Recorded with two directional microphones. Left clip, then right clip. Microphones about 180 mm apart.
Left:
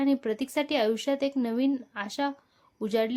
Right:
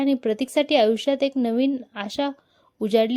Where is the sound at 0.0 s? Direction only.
30° right (ahead or behind).